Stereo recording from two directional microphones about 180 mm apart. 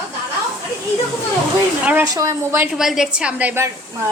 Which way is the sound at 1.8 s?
15° right (ahead or behind).